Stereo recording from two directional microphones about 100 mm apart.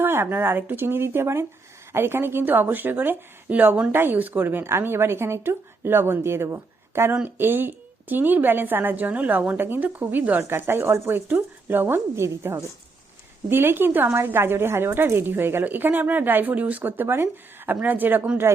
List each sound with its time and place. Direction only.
0.0 s a woman's voice: 20° right (ahead or behind)